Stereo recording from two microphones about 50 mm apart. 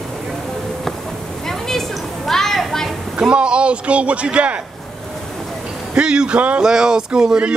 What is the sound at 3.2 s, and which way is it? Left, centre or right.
A man's voice, right.